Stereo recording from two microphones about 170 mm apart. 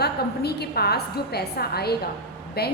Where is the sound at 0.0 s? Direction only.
70° left (ahead or behind).